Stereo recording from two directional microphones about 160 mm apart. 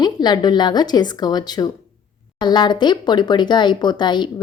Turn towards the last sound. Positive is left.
turn(degrees=30)  # may be behind; listen again after turning